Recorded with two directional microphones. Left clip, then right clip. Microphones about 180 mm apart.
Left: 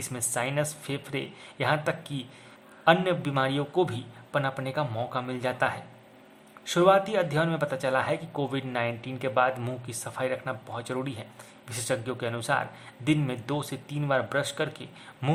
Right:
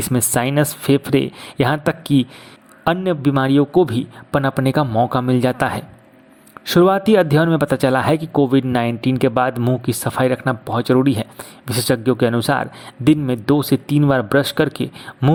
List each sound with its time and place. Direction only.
0.1 s speech: 45° right (ahead or behind)